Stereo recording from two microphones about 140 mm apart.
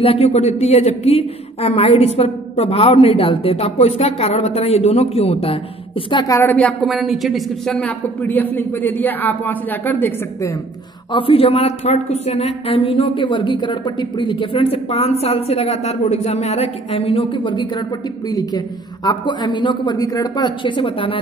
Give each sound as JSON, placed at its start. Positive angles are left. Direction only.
{"t": 0.0, "sound": "a woman's voice", "side_deg": 45}
{"t": 6.2, "sound": "a woman's voice", "side_deg": 20}
{"t": 6.5, "sound": "a man's voice", "side_deg": 5}
{"t": 11.1, "sound": "a woman's voice", "side_deg": 40}